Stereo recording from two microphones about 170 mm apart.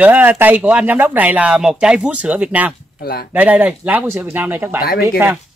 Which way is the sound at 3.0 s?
65° left (ahead or behind).